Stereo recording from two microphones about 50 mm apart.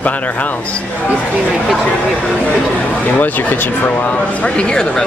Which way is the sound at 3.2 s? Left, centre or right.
Left.